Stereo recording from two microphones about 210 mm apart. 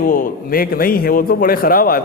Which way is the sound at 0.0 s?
40° left (ahead or behind).